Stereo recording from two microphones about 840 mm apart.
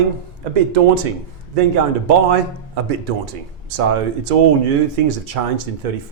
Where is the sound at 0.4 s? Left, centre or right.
Right.